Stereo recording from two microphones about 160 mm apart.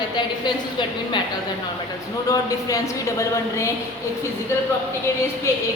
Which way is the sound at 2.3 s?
20° left (ahead or behind).